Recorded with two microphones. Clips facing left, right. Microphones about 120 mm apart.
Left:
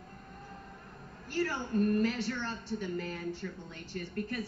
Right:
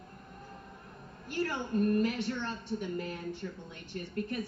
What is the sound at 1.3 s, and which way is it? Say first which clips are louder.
A woman's voice: even; 20° right (ahead or behind).